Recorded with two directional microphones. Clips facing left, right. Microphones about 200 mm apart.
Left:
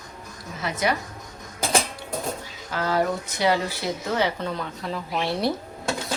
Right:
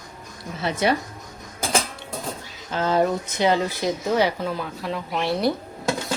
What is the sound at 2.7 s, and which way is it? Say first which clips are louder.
Speech: right 3 dB; 20° right (ahead or behind).